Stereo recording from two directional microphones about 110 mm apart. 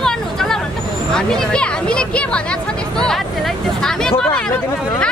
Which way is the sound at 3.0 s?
5° left (ahead or behind).